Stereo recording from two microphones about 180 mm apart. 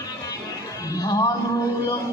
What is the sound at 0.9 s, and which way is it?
Music, 20° left (ahead or behind).